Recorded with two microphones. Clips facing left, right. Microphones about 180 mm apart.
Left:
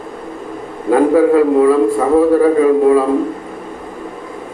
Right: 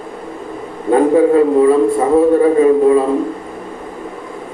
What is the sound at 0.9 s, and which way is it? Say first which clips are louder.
A man's voice: even; 25° right (ahead or behind).